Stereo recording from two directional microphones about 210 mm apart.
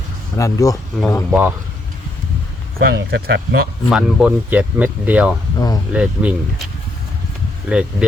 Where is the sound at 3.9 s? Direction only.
5° right (ahead or behind).